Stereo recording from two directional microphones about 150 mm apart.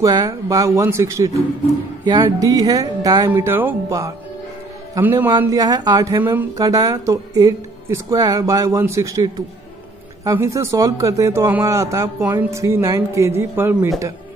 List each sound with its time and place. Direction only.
0.0 s a man's voice: 25° right (ahead or behind)
3.3 s speech: 15° right (ahead or behind)
5.5 s a man's voice: 25° right (ahead or behind)